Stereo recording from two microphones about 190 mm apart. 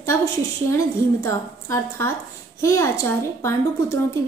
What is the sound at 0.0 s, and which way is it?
A woman's voice, 15° left (ahead or behind).